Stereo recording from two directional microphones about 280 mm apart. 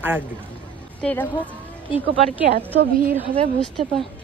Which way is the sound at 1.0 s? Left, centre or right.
Centre.